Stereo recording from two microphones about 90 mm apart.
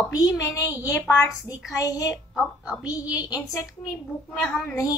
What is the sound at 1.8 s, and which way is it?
Speech, 40° left (ahead or behind).